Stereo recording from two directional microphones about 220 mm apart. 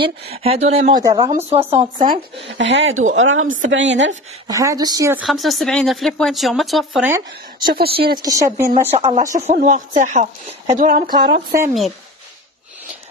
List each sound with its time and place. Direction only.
0.3 s speech: 25° right (ahead or behind)
0.9 s speech: 20° right (ahead or behind)
2.4 s speech: 55° right (ahead or behind)
4.5 s speech: 15° right (ahead or behind)
5.2 s speech: centre (ahead or behind)
7.6 s speech: 40° right (ahead or behind)
7.9 s speech: 20° right (ahead or behind)
8.9 s speech: 30° right (ahead or behind); by 11.4 s 45° right (ahead or behind)